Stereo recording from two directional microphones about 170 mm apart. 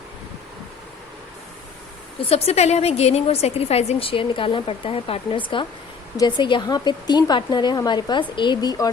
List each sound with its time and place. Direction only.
2.3 s a woman's voice: 35° left (ahead or behind)